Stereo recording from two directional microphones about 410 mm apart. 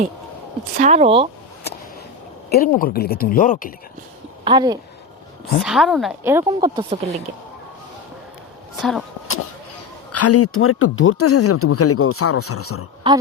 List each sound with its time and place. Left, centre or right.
0.8 s speech: centre
2.5 s speech: left
4.4 s speech: centre
5.5 s speech: centre
8.8 s speech: centre
10.1 s speech: left
13.0 s speech: centre